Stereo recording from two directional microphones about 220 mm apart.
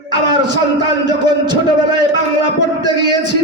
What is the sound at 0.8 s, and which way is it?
A man's voice, 20° right (ahead or behind).